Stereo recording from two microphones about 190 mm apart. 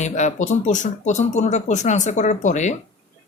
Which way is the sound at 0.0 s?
40° left (ahead or behind).